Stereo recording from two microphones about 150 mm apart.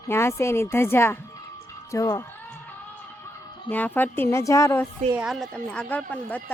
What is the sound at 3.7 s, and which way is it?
Speech, 10° left (ahead or behind).